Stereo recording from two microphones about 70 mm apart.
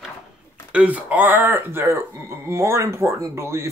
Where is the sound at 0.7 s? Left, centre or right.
Right.